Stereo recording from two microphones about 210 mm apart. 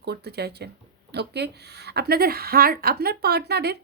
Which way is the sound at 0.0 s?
50° right (ahead or behind).